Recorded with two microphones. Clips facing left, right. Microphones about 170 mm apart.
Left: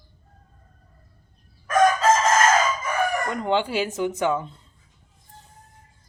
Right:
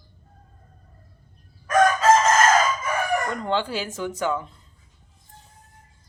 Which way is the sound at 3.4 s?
15° left (ahead or behind).